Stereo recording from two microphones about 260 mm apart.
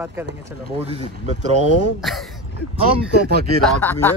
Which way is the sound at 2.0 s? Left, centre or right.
Centre.